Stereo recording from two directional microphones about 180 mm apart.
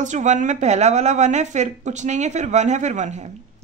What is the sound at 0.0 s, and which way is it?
A woman's voice, 40° right (ahead or behind).